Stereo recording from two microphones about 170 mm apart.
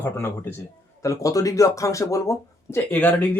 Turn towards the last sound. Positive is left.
turn(degrees=10)  # may be behind; listen again after turning